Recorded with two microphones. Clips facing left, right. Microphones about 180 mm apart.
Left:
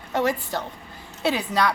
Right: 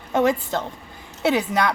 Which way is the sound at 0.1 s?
20° right (ahead or behind).